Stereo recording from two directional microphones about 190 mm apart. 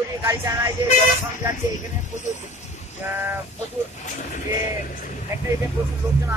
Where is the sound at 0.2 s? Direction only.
15° right (ahead or behind).